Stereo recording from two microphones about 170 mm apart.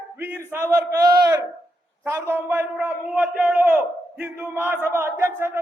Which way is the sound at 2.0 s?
15° right (ahead or behind).